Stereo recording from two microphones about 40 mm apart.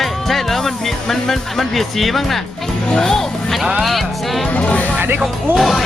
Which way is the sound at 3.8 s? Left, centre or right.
Centre.